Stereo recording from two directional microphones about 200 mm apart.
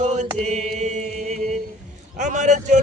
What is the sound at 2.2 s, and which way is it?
Chant, 35° right (ahead or behind).